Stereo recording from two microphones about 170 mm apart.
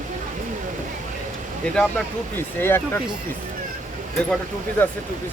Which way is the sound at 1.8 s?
10° left (ahead or behind).